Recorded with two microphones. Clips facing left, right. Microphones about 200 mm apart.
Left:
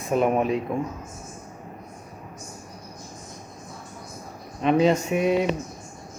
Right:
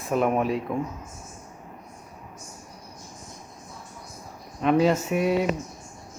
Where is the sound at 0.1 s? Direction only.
25° left (ahead or behind).